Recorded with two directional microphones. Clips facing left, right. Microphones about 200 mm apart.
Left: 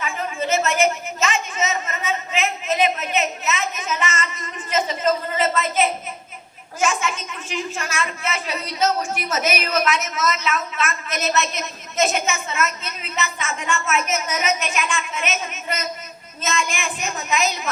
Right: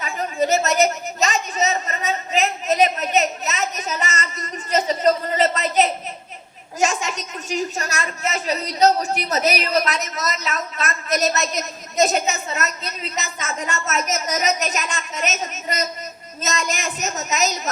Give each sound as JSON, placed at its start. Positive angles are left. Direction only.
{"t": 0.0, "sound": "a woman's voice", "side_deg": -40}